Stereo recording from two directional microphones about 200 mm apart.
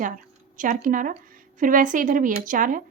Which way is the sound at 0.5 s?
40° right (ahead or behind).